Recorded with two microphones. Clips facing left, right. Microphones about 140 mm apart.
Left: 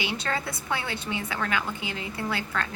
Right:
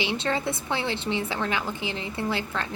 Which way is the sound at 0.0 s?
25° right (ahead or behind).